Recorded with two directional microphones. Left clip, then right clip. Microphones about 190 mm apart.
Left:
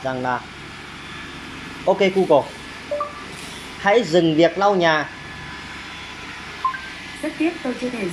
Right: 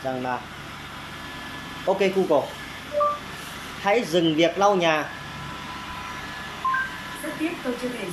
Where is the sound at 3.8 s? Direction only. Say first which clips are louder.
Left 5 dB; 10° right (ahead or behind).